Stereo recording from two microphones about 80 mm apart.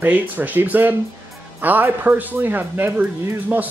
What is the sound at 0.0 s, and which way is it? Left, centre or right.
Speech, right.